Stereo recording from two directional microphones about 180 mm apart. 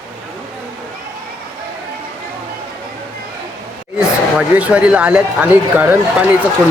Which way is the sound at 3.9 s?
5° right (ahead or behind).